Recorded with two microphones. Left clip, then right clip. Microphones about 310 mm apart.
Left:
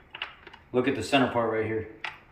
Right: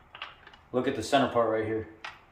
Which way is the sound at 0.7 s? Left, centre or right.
Centre.